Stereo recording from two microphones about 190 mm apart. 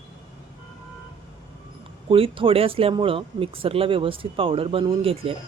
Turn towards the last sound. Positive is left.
turn(degrees=-30)  # may be behind; listen again after turning